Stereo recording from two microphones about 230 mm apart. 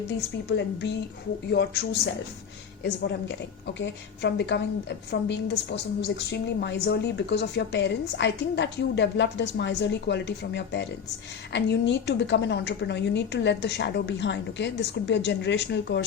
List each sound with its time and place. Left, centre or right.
1.5 s a woman's voice: left
2.8 s a woman's voice: left